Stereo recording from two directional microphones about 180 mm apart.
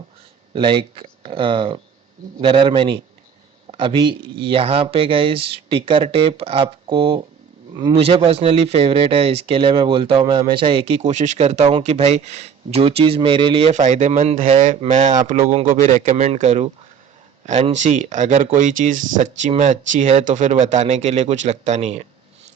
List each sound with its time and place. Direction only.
0.5 s a man's voice: 30° right (ahead or behind)